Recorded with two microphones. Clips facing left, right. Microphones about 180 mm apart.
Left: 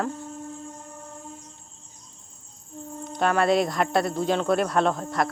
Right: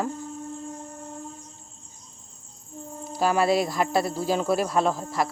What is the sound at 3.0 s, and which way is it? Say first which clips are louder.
Speech: even; 5° right (ahead or behind).